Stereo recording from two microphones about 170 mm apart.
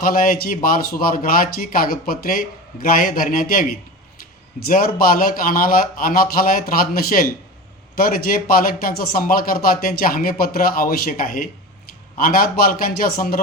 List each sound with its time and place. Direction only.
0.0 s speech: 55° left (ahead or behind)